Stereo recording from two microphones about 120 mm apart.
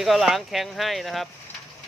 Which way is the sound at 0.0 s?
Centre (ahead or behind).